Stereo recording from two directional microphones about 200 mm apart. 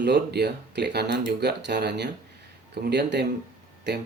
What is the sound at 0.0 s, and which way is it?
Speech, 55° right (ahead or behind).